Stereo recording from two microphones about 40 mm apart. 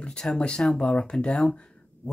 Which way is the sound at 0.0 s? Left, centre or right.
Left.